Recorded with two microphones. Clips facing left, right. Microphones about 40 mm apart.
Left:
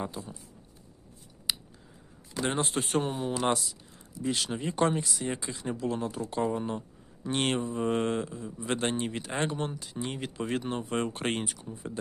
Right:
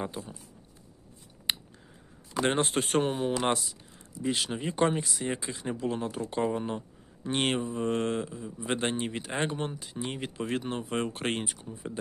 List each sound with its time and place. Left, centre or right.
1.5 s scissors: right
2.4 s speech: right
4.2 s speech: right
7.8 s speech: centre